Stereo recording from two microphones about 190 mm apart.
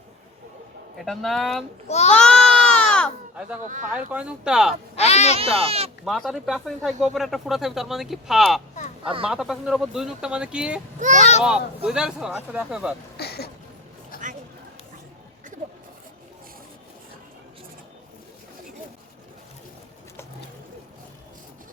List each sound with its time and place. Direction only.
0.9 s speech: centre (ahead or behind)
1.9 s speech: 35° left (ahead or behind)
2.1 s baby cry: 5° left (ahead or behind)
3.6 s speech: 40° right (ahead or behind)
4.1 s speech: 5° right (ahead or behind)
4.9 s speech: 35° left (ahead or behind)
5.4 s speech: 30° right (ahead or behind)
6.1 s speech: centre (ahead or behind)
11.2 s speech: 35° left (ahead or behind)
11.4 s speech: 5° right (ahead or behind)
13.1 s a sound: 55° left (ahead or behind)